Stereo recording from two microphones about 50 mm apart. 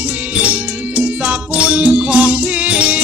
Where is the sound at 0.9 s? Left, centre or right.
Right.